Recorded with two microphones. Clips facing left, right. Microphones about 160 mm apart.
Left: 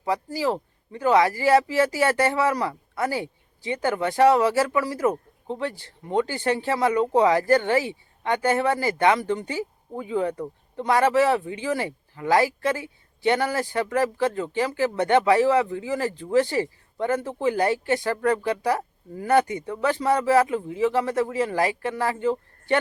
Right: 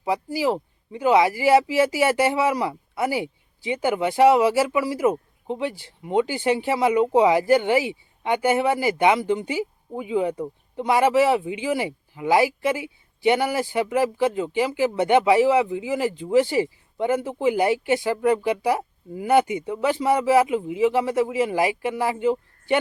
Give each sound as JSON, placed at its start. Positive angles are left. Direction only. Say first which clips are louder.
{"t": 0.0, "sound": "speech", "louder": "right 2 dB", "side_deg": -10}